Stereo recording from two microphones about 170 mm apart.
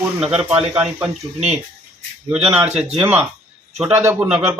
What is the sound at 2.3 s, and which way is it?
Speech, 10° right (ahead or behind).